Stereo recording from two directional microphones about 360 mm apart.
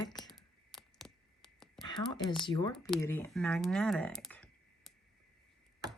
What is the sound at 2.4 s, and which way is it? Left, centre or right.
Speech, centre.